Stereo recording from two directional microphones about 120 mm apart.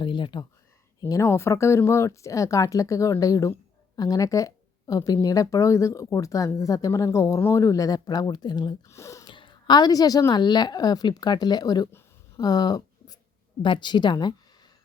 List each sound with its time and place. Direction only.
0.0 s a sound: 40° left (ahead or behind)
1.0 s speech: 25° left (ahead or behind)
8.9 s speech: 25° left (ahead or behind)
9.2 s a woman's voice: 45° left (ahead or behind)
12.4 s a sound: 35° left (ahead or behind)
13.6 s a woman's voice: 40° left (ahead or behind)